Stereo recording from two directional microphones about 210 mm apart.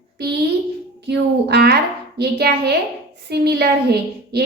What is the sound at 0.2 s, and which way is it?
A child's voice, 50° right (ahead or behind).